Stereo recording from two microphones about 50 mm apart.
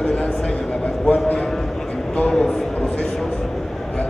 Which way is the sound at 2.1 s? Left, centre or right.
Centre.